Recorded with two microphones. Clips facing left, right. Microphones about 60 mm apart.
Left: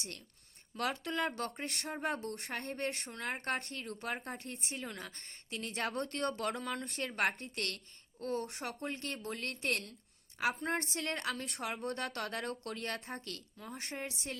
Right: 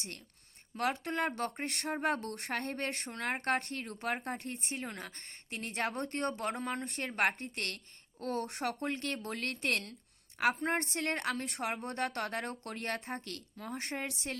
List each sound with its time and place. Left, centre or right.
0.8 s speech: right
6.0 s speech: right
6.5 s speech: right
11.4 s speech: right
13.7 s speech: right